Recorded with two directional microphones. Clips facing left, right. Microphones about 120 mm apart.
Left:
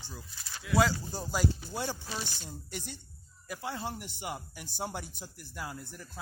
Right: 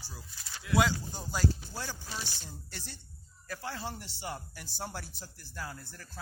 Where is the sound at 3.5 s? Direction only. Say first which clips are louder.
Left 2 dB; 15° left (ahead or behind).